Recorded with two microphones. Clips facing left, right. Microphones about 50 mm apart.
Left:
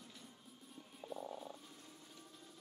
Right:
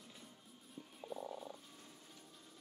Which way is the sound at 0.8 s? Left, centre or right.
Centre.